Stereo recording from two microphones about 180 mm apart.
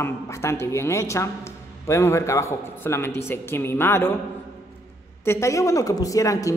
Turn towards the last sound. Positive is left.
turn(degrees=20)  # may be behind; listen again after turning